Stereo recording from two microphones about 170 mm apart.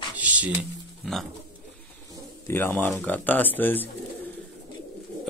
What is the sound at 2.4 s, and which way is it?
Speech, 15° left (ahead or behind).